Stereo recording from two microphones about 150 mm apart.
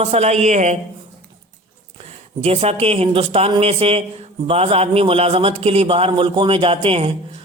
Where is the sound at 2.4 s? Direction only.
40° right (ahead or behind).